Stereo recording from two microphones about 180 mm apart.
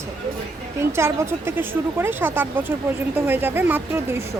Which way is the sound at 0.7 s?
15° right (ahead or behind).